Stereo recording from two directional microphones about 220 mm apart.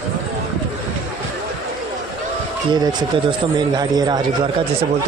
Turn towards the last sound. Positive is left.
turn(degrees=-20)  # may be behind; listen again after turning